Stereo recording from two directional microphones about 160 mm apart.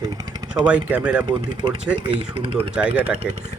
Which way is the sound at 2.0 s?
35° right (ahead or behind).